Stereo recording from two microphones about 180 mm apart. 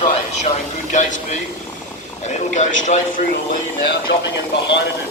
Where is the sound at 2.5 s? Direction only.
40° left (ahead or behind).